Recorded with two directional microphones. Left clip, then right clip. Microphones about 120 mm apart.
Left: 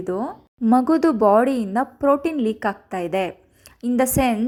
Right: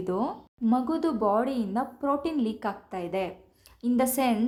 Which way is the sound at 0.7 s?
60° left (ahead or behind).